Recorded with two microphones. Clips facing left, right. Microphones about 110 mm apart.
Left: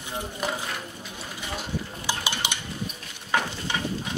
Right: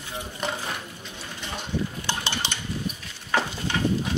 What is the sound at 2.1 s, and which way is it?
Stir, 10° left (ahead or behind).